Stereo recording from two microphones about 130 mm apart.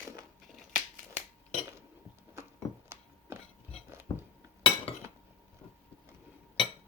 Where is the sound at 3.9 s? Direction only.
15° right (ahead or behind).